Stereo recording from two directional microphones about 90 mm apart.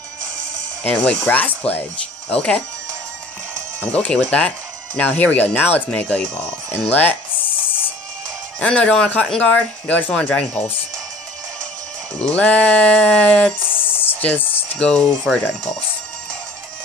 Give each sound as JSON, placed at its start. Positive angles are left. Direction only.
{"t": 0.8, "sound": "speech", "side_deg": 10}
{"t": 3.8, "sound": "speech", "side_deg": 15}
{"t": 8.5, "sound": "speech", "side_deg": 10}
{"t": 12.2, "sound": "speech", "side_deg": 15}